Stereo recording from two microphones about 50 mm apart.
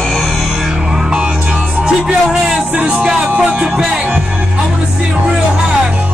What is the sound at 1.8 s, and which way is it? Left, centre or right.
Music, centre.